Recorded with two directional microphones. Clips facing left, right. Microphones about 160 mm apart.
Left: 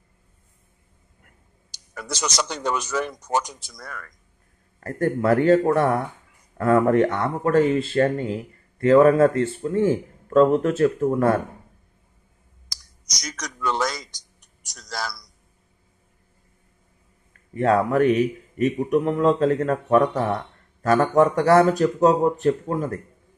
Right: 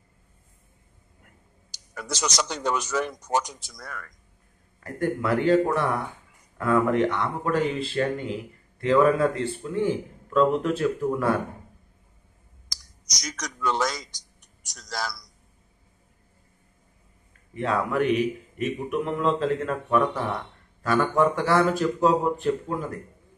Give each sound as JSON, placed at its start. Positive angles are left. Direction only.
{"t": 1.7, "sound": "speech", "side_deg": 60}
{"t": 13.1, "sound": "a sound", "side_deg": 60}
{"t": 17.6, "sound": "speech", "side_deg": 45}